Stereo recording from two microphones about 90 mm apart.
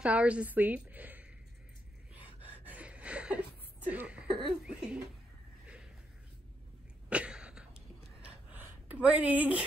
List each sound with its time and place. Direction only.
0.0 s a woman's voice: 15° right (ahead or behind)
2.4 s chuckle: 20° right (ahead or behind)
4.3 s speech: 65° right (ahead or behind)
4.6 s a woman's voice: 10° right (ahead or behind)
7.1 s a sound: 10° right (ahead or behind)